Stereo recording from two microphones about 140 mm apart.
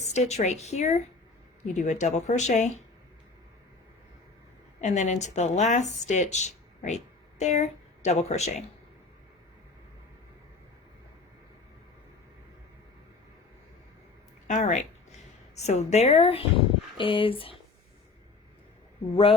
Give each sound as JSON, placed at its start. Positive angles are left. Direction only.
{"t": 0.0, "sound": "speech", "side_deg": 50}
{"t": 4.8, "sound": "speech", "side_deg": 60}
{"t": 14.4, "sound": "a woman's voice", "side_deg": 60}